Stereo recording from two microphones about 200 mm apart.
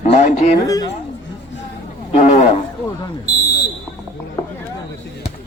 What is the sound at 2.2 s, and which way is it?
Speech, 35° left (ahead or behind).